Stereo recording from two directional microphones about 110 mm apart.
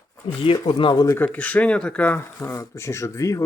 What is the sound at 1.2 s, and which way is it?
Speech, 15° left (ahead or behind).